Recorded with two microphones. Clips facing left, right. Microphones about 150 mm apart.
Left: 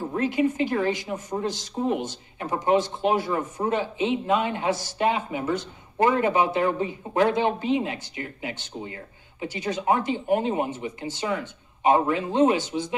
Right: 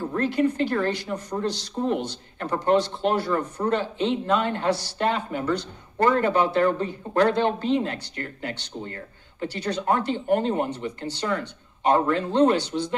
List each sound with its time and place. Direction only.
0.1 s speech: 15° left (ahead or behind)
4.6 s speech: 70° right (ahead or behind)
4.9 s speech: 10° left (ahead or behind)
12.5 s speech: 70° right (ahead or behind)